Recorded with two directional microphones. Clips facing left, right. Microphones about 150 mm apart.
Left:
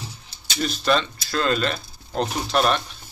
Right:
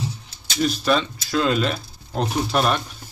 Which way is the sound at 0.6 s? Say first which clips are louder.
Right 2 dB; 5° right (ahead or behind).